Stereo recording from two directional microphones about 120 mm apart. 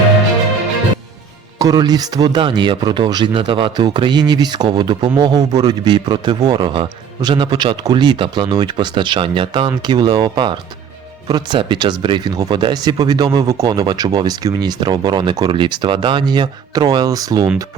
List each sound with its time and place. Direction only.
1.5 s speech: 30° right (ahead or behind)